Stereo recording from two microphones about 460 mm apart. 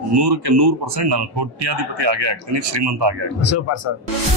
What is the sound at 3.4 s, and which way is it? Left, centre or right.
Speech, left.